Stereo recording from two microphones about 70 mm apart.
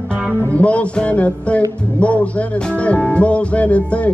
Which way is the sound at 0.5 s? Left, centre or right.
Centre.